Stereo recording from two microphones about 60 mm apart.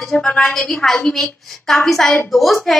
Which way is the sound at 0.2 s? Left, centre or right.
Centre.